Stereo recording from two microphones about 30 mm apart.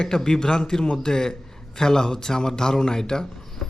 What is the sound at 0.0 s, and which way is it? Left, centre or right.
A man's voice, left.